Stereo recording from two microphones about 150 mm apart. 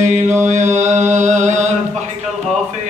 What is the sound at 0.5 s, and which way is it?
Mantra, 55° right (ahead or behind).